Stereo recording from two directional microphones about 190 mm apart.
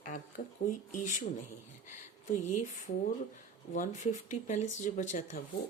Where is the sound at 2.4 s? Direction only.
40° left (ahead or behind).